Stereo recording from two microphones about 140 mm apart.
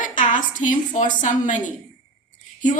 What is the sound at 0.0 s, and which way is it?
A woman's voice, 65° left (ahead or behind).